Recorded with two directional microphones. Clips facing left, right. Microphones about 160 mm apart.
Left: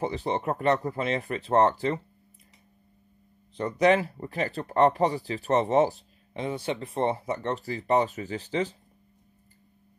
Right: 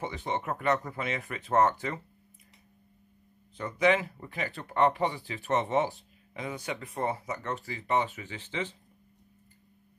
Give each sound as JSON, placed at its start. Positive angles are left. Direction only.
{"t": 0.0, "sound": "speech", "side_deg": 35}
{"t": 3.5, "sound": "speech", "side_deg": 35}